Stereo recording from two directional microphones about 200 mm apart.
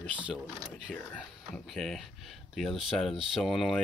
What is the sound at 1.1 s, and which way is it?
Speech, centre (ahead or behind).